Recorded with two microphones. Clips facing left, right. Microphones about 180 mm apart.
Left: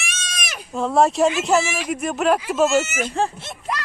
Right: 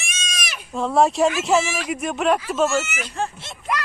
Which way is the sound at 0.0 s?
55° left (ahead or behind).